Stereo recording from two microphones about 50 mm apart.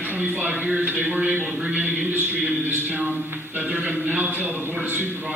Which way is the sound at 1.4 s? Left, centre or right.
Centre.